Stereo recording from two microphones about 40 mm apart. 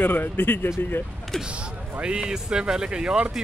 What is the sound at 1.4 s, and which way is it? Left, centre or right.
Speech, right.